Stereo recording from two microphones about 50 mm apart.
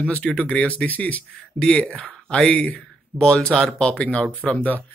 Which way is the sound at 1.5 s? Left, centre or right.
Centre.